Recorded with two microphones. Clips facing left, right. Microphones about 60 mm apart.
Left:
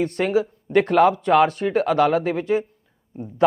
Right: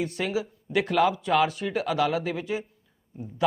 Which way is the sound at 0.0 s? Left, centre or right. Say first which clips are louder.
Left 8 dB; left.